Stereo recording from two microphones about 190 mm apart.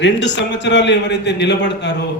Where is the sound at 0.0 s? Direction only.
70° left (ahead or behind).